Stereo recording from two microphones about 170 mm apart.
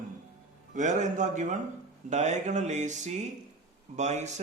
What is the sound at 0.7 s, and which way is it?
A man's voice, 45° right (ahead or behind).